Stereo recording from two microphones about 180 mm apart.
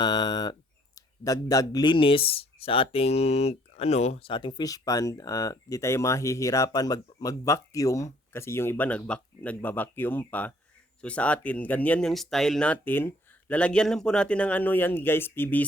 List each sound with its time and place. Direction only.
0.0 s speech: 25° left (ahead or behind)